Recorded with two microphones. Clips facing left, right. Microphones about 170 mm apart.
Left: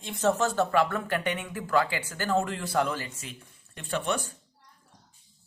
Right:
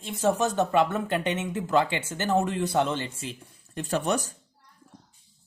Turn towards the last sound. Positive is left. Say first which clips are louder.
# right 3 dB
turn(degrees=-40)  # may be behind; listen again after turning